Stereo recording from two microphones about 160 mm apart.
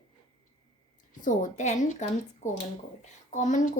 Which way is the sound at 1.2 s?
50° left (ahead or behind).